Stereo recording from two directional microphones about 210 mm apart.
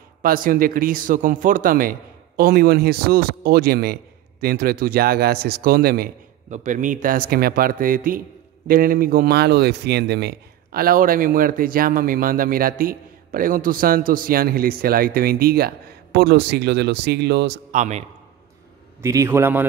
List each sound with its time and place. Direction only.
0.2 s a man's voice: 40° right (ahead or behind)
17.6 s a man's voice: 35° right (ahead or behind)
19.0 s a man's voice: 15° right (ahead or behind)